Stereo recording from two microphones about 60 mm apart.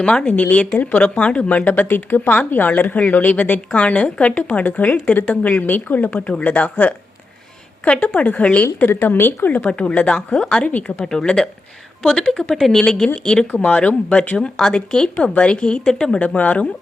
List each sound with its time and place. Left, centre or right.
0.0 s speech: centre
7.9 s speech: left
9.1 s speech: left; by 10.5 s centre
10.7 s speech: left
11.0 s speech: centre
16.2 s speech: left